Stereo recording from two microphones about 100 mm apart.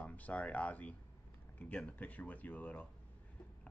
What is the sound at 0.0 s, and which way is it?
Speech, 15° left (ahead or behind).